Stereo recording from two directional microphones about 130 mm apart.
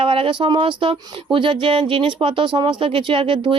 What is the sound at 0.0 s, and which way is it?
Speech, 40° right (ahead or behind).